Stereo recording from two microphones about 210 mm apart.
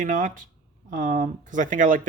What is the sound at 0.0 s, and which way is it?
Speech, 40° right (ahead or behind).